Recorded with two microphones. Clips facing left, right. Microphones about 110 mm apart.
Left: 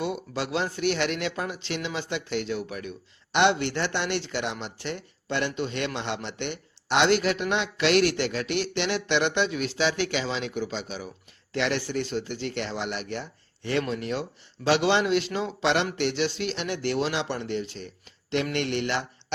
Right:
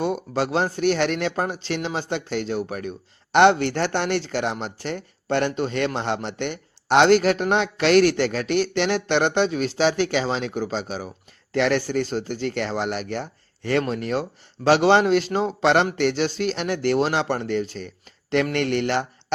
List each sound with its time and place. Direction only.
0.0 s a man's voice: 40° right (ahead or behind)